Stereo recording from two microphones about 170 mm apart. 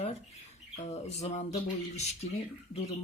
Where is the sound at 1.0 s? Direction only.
40° left (ahead or behind).